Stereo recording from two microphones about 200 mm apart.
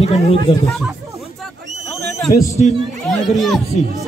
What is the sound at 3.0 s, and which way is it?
Speech, centre (ahead or behind).